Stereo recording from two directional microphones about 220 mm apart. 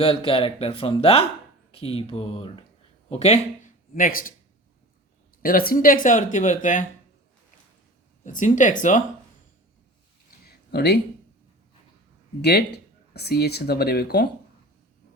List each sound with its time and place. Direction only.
0.0 s speech: 25° left (ahead or behind); by 4.4 s 40° left (ahead or behind)
5.4 s speech: 40° left (ahead or behind)
8.2 s speech: 35° left (ahead or behind)
10.4 s a sound: 45° left (ahead or behind)
12.4 s speech: 50° left (ahead or behind)